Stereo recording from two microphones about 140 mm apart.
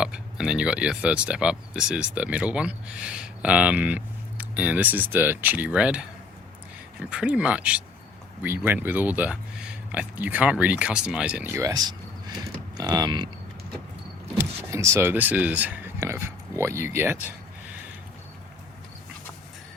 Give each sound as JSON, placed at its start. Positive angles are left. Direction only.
{"t": 0.0, "sound": "speech", "side_deg": -5}
{"t": 14.3, "sound": "speech", "side_deg": -20}